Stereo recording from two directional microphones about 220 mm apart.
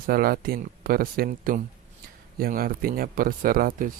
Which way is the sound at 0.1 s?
45° right (ahead or behind).